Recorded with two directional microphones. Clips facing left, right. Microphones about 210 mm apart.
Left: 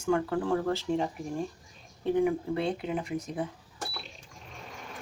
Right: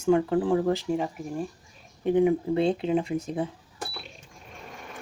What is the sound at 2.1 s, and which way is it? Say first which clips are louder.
Speech: right 5 dB; 20° right (ahead or behind).